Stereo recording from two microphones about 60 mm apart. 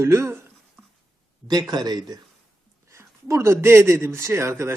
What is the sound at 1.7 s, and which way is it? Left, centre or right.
Speech, right.